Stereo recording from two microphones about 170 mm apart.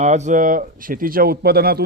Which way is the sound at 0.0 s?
45° right (ahead or behind).